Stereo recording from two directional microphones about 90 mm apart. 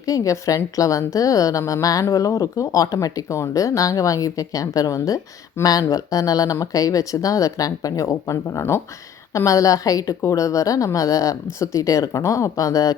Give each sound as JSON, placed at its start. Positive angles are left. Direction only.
{"t": 0.0, "sound": "a woman's voice", "side_deg": 40}